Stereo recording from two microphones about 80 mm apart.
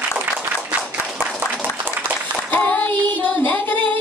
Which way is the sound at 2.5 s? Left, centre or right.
Centre.